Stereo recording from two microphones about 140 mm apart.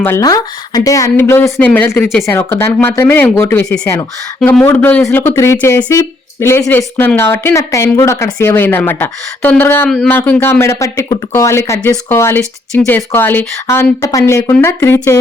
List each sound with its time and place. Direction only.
0.0 s speech: 20° left (ahead or behind)
1.1 s speech: 15° left (ahead or behind)